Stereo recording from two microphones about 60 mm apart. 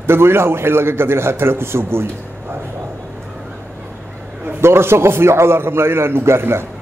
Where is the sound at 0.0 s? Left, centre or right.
Right.